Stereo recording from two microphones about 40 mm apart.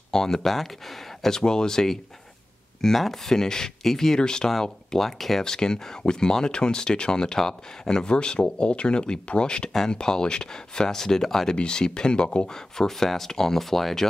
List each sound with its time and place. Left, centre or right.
0.1 s speech: centre
4.9 s speech: centre
11.5 s speech: left; by 14.0 s centre